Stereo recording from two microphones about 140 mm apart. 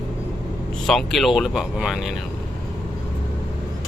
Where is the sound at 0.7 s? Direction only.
Centre (ahead or behind).